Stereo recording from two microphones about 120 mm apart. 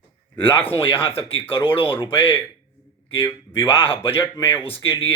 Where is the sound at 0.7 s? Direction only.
50° left (ahead or behind).